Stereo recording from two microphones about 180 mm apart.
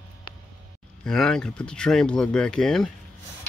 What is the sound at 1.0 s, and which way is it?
Speech, 5° left (ahead or behind).